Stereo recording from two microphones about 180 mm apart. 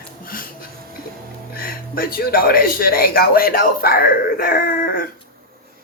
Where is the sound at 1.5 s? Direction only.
55° left (ahead or behind).